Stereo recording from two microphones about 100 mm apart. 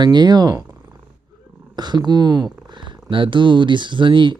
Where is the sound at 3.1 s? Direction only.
55° right (ahead or behind).